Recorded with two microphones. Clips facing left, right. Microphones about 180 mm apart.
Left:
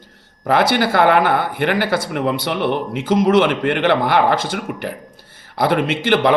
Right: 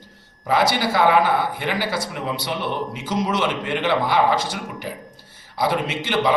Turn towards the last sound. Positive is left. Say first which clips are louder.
# left 6 dB
turn(degrees=60)  # may be behind; listen again after turning